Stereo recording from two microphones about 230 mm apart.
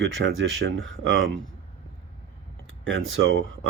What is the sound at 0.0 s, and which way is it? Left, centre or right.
Speech, right.